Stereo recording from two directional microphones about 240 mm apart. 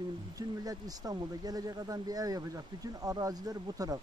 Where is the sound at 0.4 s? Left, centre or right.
Centre.